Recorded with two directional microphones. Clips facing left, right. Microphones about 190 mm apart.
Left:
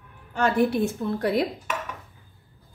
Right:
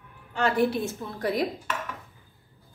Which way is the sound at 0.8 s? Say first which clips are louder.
Left 5 dB; 60° left (ahead or behind).